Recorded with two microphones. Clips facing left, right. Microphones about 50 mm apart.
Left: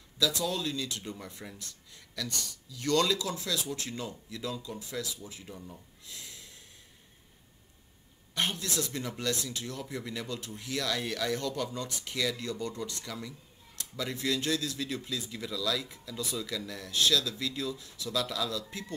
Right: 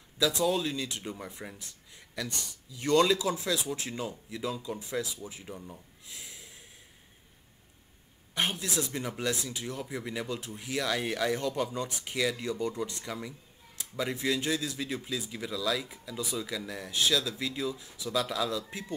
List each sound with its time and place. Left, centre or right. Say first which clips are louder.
0.2 s speech: right 3 dB; right
5.6 s gasp: right 1 dB; centre
8.4 s speech: right 1 dB; centre